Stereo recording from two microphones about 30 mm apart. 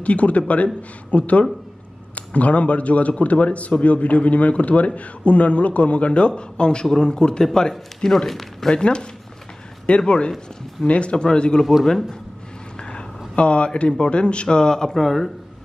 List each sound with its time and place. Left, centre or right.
0.0 s a man's voice: left
8.3 s speech: centre
8.6 s speech: left
11.8 s speech: centre
12.7 s vehicle: left
13.4 s speech: left
13.7 s speech: left
15.0 s speech: centre